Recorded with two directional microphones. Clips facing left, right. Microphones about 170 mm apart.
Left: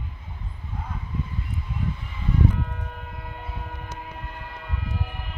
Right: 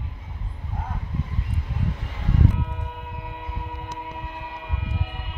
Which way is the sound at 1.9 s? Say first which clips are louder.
Even; 85° right.